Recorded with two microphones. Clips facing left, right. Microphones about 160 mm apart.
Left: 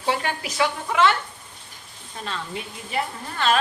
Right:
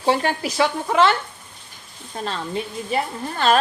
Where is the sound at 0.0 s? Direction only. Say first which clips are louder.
Right 5 dB; 35° right (ahead or behind).